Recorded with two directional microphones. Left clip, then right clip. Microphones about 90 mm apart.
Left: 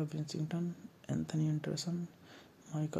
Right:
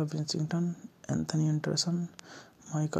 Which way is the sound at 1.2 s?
40° right (ahead or behind).